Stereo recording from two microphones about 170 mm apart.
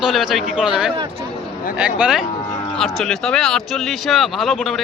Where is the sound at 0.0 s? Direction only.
Centre (ahead or behind).